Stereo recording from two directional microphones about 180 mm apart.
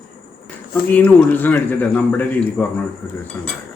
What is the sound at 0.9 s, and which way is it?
A man's voice, 10° left (ahead or behind).